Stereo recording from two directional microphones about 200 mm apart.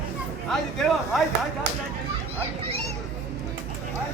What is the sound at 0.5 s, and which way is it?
Speech, centre (ahead or behind).